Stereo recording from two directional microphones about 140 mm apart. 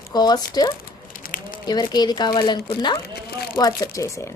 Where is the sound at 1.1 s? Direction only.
80° left.